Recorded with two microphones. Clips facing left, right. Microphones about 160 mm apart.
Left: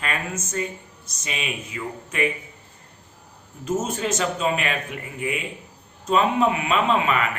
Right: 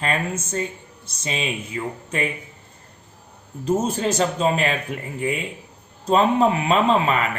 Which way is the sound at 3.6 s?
30° right (ahead or behind).